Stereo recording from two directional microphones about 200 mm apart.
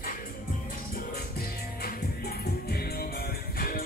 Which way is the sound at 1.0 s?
50° left (ahead or behind).